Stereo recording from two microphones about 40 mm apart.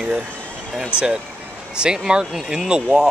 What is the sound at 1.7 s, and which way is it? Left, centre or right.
Speech, right.